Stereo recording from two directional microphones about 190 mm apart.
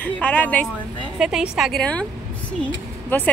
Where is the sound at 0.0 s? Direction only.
10° left (ahead or behind).